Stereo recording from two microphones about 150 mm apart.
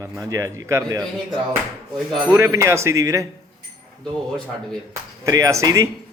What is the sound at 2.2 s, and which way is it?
Speech, 15° right (ahead or behind).